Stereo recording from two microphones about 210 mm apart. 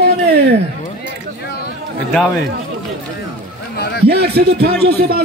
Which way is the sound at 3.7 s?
50° left (ahead or behind).